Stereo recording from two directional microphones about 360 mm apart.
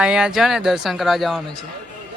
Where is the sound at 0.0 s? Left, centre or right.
Centre.